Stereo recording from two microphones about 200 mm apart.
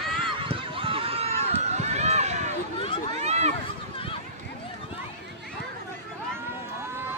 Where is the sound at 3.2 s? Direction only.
35° right (ahead or behind).